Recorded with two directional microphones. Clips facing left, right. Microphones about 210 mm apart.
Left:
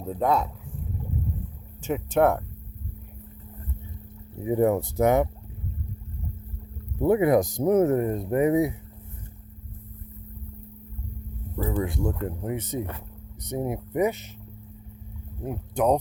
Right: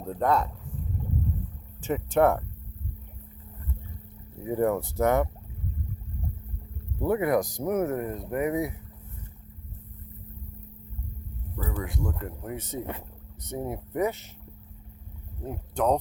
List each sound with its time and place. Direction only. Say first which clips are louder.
0.0 s speech: left 1 dB; 5° left (ahead or behind)
1.8 s speech: left 1 dB; centre (ahead or behind)
4.4 s speech: left 3 dB; 15° left (ahead or behind)
7.0 s speech: left 5 dB; 20° left (ahead or behind)
11.5 s speech: left 6 dB; 30° left (ahead or behind)
15.4 s speech: left 3 dB; 15° left (ahead or behind)